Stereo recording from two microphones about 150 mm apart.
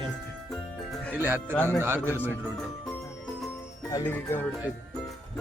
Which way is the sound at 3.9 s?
15° left (ahead or behind).